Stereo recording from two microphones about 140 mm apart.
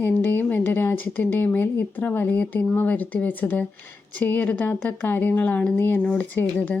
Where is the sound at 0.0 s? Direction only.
15° left (ahead or behind).